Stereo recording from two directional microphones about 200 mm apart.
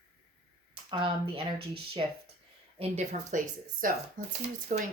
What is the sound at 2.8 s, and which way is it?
Speech, 35° right (ahead or behind).